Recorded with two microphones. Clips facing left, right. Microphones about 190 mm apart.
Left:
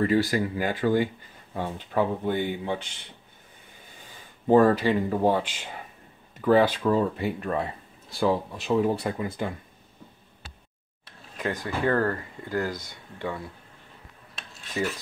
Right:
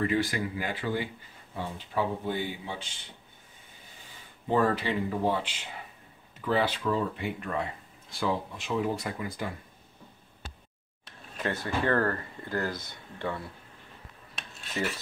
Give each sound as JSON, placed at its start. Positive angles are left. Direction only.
{"t": 0.0, "sound": "speech", "side_deg": 40}
{"t": 4.5, "sound": "speech", "side_deg": 45}
{"t": 11.3, "sound": "speech", "side_deg": 10}